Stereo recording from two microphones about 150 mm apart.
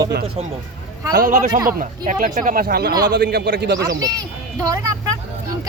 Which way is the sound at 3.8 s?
25° right (ahead or behind).